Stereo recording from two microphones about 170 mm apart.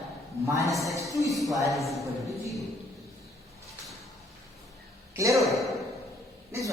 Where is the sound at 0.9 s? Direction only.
20° right (ahead or behind).